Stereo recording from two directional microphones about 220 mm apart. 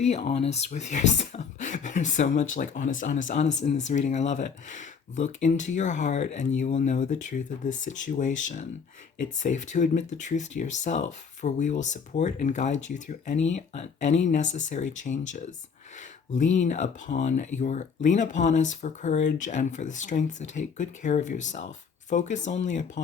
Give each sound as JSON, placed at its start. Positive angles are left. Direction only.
{"t": 0.0, "sound": "speech", "side_deg": 30}